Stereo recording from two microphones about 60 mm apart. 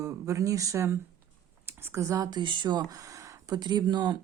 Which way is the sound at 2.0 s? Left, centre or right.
Right.